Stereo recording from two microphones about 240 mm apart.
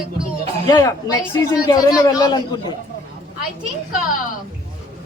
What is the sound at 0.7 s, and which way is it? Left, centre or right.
A man's voice, centre.